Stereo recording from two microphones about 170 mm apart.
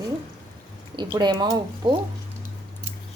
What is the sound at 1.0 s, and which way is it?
Speech, 25° right (ahead or behind).